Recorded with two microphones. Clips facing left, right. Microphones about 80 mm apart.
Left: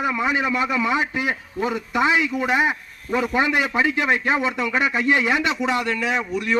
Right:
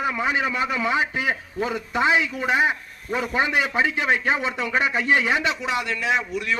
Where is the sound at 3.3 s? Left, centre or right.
Right.